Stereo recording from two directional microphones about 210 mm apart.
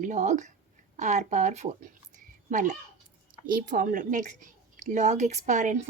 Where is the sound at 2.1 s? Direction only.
35° right (ahead or behind).